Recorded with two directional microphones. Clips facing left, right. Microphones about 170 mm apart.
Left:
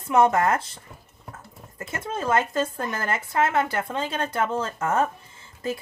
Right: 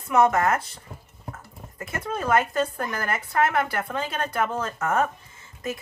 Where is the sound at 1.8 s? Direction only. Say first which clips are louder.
Even; 25° left (ahead or behind).